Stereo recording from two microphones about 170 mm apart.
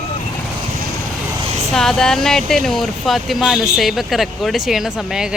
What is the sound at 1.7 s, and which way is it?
Speech, 5° left (ahead or behind).